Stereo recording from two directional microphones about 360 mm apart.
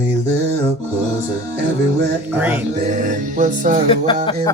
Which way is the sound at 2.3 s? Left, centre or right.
Centre.